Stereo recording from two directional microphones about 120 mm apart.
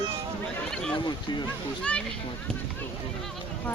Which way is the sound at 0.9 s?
40° left (ahead or behind).